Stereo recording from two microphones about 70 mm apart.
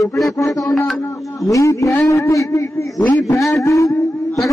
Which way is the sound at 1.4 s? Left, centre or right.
Left.